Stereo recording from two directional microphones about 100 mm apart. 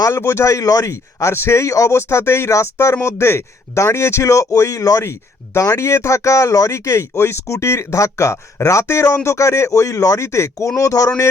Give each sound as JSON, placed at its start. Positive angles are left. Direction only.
{"t": 0.0, "sound": "speech", "side_deg": 30}